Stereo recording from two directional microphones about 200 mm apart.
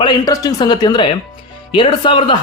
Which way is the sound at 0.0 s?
20° left (ahead or behind).